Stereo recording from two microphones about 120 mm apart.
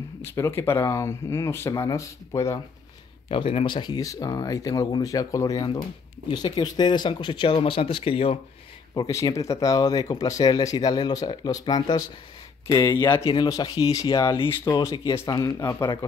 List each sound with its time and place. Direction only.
0.2 s speech: 20° left (ahead or behind)
3.3 s speech: 50° left (ahead or behind)
8.9 s speech: 30° left (ahead or behind)